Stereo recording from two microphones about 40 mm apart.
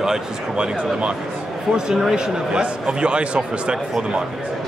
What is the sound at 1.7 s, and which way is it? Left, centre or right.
Speech, centre.